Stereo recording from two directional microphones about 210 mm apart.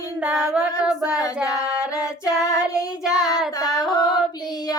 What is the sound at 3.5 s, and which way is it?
Singing, 20° left (ahead or behind).